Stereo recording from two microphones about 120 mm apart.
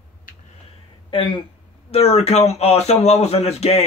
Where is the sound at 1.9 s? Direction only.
60° left (ahead or behind).